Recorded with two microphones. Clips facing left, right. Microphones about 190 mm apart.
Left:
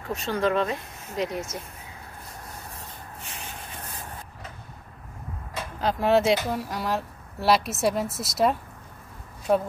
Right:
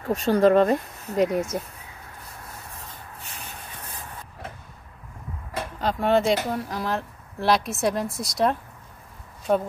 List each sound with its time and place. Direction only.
0.1 s speech: 40° right (ahead or behind)
3.2 s shuffle: 35° right (ahead or behind)
5.8 s speech: centre (ahead or behind)